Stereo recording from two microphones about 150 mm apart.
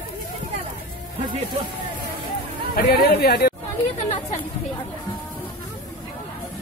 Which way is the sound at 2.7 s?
90° left.